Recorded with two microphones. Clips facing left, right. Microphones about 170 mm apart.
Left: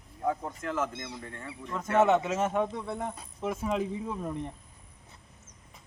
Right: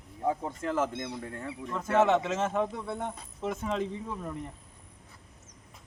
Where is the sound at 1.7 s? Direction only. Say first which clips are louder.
Left 1 dB; centre (ahead or behind); by 4.3 s 15° left (ahead or behind).